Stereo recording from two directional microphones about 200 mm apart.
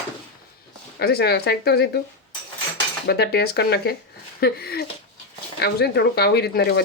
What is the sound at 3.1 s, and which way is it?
Speech, 55° left (ahead or behind).